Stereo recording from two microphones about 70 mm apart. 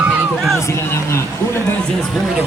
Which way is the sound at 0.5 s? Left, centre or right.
Left.